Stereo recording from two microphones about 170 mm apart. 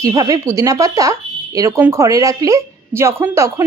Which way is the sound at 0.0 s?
20° right (ahead or behind).